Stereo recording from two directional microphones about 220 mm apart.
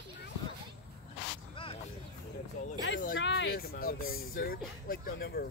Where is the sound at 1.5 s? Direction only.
25° left (ahead or behind).